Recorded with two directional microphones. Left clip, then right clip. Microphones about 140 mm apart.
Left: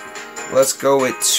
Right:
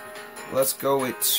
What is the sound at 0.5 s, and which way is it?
Speech, 20° left (ahead or behind).